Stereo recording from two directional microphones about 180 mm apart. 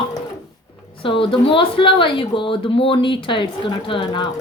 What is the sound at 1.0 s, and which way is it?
A woman's voice, 30° left (ahead or behind).